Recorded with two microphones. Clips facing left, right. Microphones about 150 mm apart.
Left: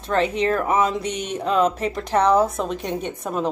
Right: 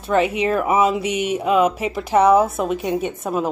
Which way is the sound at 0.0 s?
10° right (ahead or behind).